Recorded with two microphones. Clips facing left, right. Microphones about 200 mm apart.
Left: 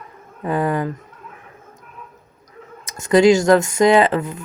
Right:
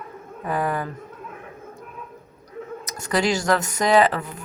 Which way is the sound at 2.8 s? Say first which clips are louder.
Left 10 dB; 25° left (ahead or behind).